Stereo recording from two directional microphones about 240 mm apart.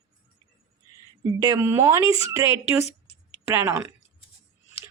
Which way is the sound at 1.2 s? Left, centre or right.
Centre.